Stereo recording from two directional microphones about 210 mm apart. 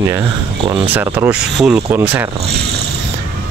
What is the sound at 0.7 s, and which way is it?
Speech, 25° right (ahead or behind).